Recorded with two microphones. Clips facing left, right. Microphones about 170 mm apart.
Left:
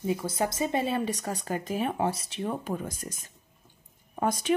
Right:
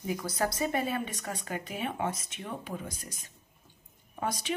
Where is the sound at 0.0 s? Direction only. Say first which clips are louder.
Left 3 dB; 25° left (ahead or behind).